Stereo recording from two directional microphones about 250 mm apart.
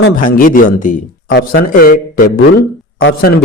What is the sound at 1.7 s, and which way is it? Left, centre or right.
A man's voice, left.